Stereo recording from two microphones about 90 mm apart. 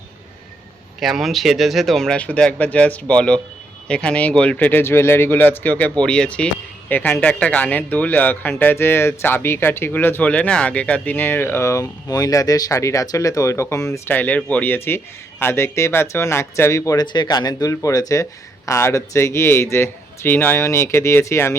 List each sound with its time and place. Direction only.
0.9 s speech: centre (ahead or behind); by 14.0 s 35° left (ahead or behind)
14.1 s speech: 20° left (ahead or behind); by 17.1 s 40° left (ahead or behind)
17.1 s speech: 55° left (ahead or behind); by 20.6 s 20° left (ahead or behind)
20.6 s speech: 35° left (ahead or behind)